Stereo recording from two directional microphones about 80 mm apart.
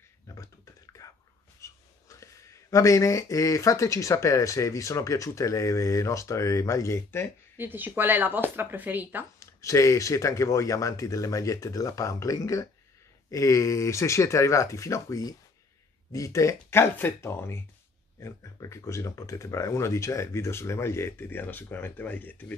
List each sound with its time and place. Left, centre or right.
0.3 s computer keyboard: left
1.0 s whispering: left
1.6 s speech: left
7.5 s speech: right
9.4 s speech: left